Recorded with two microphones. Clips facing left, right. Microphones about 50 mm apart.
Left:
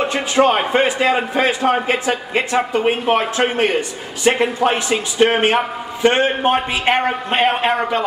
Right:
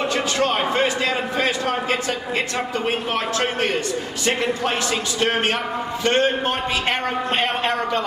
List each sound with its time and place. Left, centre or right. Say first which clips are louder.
0.0 s a man's voice: left 6 dB; left